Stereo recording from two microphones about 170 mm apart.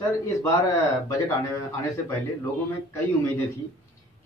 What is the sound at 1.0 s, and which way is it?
A man's voice, 15° left (ahead or behind).